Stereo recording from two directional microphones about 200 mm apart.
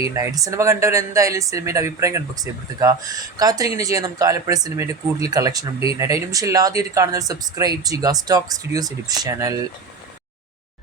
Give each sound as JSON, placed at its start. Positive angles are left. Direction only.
{"t": 0.1, "sound": "speech", "side_deg": -15}